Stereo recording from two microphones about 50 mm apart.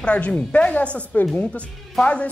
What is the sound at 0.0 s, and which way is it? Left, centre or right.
A woman's voice, left.